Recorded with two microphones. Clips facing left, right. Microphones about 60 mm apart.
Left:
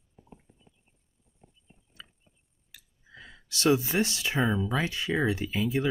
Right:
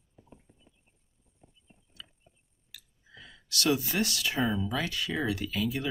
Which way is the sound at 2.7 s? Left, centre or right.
Left.